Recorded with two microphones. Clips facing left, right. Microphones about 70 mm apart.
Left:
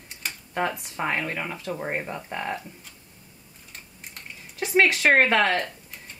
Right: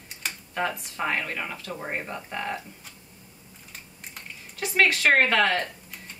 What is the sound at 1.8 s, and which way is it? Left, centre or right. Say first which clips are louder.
Speech: left 3 dB; centre.